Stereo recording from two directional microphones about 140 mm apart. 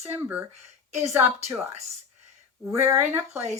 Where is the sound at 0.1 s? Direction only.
15° right (ahead or behind).